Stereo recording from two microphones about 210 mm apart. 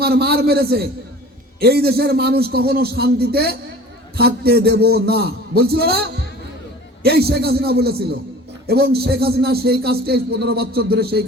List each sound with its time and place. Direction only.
0.0 s a man's voice: 50° right (ahead or behind)